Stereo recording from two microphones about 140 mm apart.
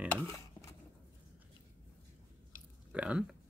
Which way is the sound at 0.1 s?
15° left (ahead or behind).